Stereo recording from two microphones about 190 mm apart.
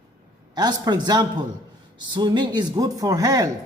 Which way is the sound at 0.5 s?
20° right (ahead or behind).